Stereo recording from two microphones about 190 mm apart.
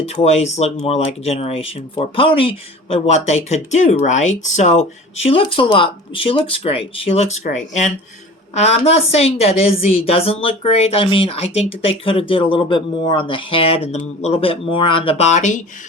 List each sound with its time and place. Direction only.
0.0 s speech: 35° left (ahead or behind)
8.5 s speech: 35° left (ahead or behind)